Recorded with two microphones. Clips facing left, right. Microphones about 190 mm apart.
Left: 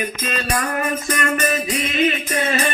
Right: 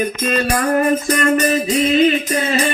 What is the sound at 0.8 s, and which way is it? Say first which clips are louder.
Speech: right 7 dB; 35° right (ahead or behind).